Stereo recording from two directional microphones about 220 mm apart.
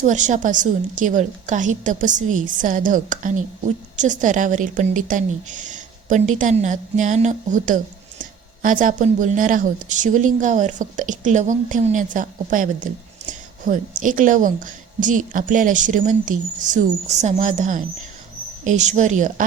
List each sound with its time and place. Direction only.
0.0 s a woman's voice: 35° right (ahead or behind)